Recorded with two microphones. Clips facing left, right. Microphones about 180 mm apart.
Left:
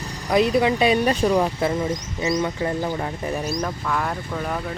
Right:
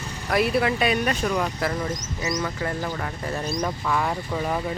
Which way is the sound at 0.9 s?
30° left (ahead or behind).